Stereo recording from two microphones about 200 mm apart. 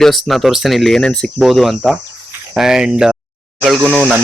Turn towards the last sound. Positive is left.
turn(degrees=5)  # may be behind; listen again after turning